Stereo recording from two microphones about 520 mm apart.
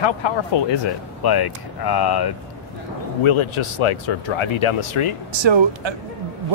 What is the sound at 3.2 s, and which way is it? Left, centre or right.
Speech, left.